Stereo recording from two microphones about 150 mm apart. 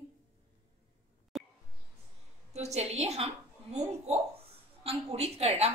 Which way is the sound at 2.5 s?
45° right (ahead or behind).